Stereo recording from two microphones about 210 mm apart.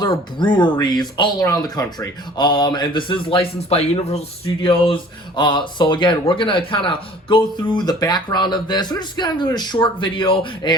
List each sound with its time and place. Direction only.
0.0 s speech: 20° left (ahead or behind)